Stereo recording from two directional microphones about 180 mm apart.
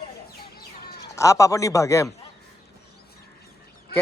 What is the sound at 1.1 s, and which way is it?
Speech, 15° left (ahead or behind).